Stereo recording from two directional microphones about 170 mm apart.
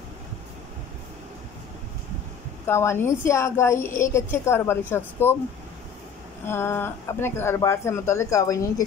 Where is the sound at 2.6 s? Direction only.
15° left (ahead or behind).